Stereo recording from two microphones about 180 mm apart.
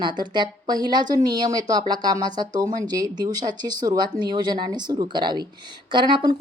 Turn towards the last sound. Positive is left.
turn(degrees=-25)  # may be behind; listen again after turning